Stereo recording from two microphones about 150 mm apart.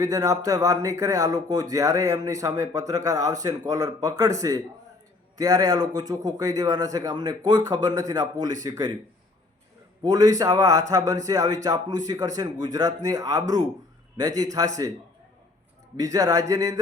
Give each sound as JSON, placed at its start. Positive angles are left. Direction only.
{"t": 0.0, "sound": "a man's voice", "side_deg": -20}
{"t": 10.0, "sound": "a man's voice", "side_deg": -25}
{"t": 16.0, "sound": "a man's voice", "side_deg": -25}